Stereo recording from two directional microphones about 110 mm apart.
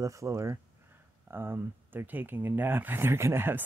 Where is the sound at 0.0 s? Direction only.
30° right (ahead or behind).